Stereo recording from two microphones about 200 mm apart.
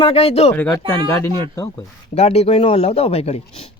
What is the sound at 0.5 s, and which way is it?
Speech, 10° left (ahead or behind).